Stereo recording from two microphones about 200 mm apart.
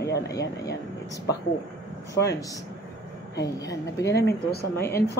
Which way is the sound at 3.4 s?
15° left (ahead or behind).